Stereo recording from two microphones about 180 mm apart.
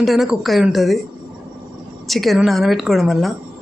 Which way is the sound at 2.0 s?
Centre (ahead or behind).